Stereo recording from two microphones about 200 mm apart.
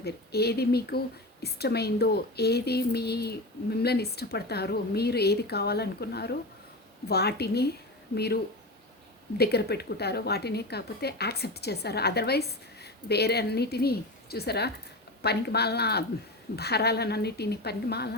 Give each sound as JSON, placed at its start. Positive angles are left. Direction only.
{"t": 0.0, "sound": "a woman's voice", "side_deg": 55}
{"t": 9.4, "sound": "a woman's voice", "side_deg": 55}